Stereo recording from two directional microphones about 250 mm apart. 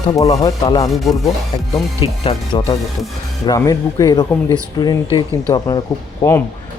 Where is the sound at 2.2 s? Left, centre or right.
Left.